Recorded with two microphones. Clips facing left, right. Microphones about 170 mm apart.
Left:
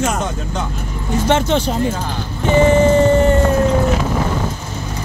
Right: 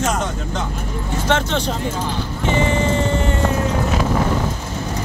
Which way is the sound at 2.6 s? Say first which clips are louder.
Left 9 dB; 45° left (ahead or behind).